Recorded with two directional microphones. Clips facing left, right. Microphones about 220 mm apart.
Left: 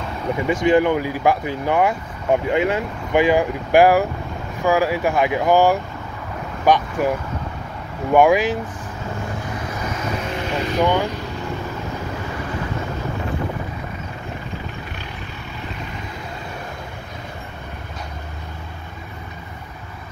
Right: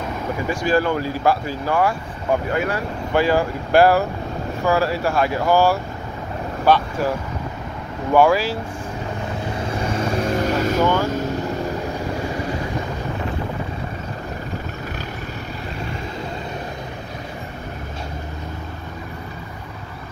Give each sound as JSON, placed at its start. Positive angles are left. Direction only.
{"t": 0.5, "sound": "speech", "side_deg": 20}
{"t": 8.1, "sound": "speech", "side_deg": 15}
{"t": 9.8, "sound": "vehicle", "side_deg": -30}
{"t": 10.2, "sound": "vehicle", "side_deg": -40}
{"t": 10.8, "sound": "speech", "side_deg": 15}
{"t": 11.1, "sound": "vehicle", "side_deg": -45}